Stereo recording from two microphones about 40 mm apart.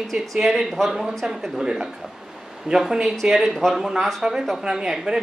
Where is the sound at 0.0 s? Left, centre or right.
Centre.